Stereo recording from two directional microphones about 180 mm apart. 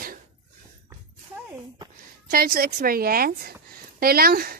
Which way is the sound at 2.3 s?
55° right (ahead or behind).